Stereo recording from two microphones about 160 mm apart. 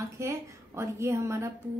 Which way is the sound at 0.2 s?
20° right (ahead or behind).